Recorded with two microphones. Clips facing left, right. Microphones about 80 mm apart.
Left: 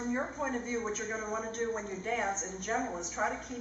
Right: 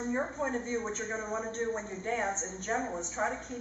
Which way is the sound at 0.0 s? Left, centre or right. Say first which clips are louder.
Right 1 dB; centre.